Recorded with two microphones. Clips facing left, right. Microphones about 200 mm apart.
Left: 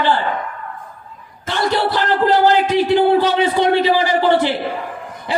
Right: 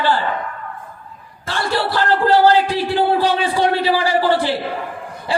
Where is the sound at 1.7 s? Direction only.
20° left (ahead or behind).